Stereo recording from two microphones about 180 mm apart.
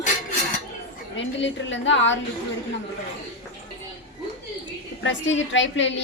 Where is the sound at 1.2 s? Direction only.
90° left.